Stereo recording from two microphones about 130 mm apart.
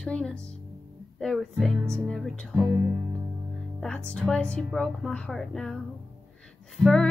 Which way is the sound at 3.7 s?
5° left (ahead or behind).